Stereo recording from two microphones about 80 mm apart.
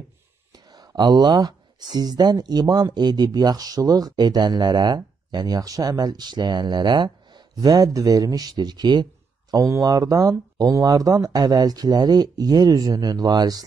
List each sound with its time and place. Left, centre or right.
0.7 s speech: right
9.5 s speech: right